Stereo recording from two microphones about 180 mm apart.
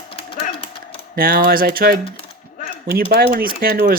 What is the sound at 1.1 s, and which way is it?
Speech, 55° right (ahead or behind).